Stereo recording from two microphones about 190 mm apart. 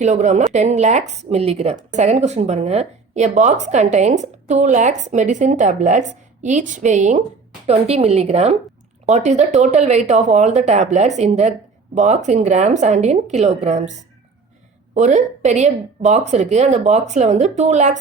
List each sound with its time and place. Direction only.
0.0 s speech: 40° right (ahead or behind)
14.9 s speech: 40° right (ahead or behind)